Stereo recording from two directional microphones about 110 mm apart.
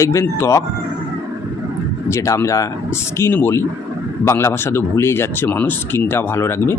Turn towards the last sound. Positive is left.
turn(degrees=25)  # may be behind; listen again after turning